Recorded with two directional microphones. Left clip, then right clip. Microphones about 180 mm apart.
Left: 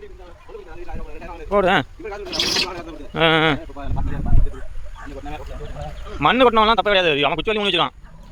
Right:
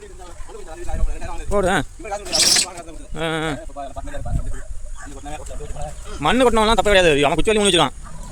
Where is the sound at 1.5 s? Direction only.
10° right (ahead or behind).